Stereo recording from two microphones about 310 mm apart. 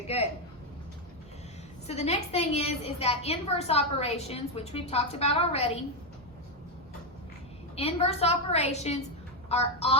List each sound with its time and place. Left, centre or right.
0.1 s a woman's voice: centre
1.9 s a woman's voice: left
7.8 s a woman's voice: centre